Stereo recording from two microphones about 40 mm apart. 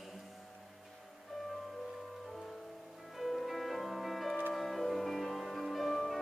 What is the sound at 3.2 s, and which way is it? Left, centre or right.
Music, centre.